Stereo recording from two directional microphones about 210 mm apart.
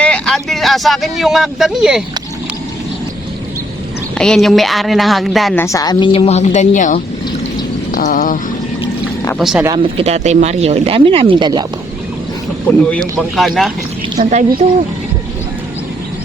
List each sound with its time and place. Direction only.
0.0 s speech: 5° left (ahead or behind)
4.2 s speech: centre (ahead or behind)
5.6 s a woman's voice: 15° left (ahead or behind); by 8.4 s 40° left (ahead or behind)
9.4 s speech: centre (ahead or behind)
9.6 s speech: 25° right (ahead or behind)
12.6 s speech: 5° left (ahead or behind)
14.2 s a woman's voice: 35° right (ahead or behind)